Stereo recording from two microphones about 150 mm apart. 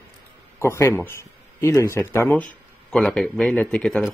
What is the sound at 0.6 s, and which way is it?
Speech, 15° left (ahead or behind).